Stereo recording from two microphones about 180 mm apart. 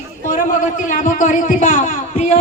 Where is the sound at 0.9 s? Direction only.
45° left (ahead or behind).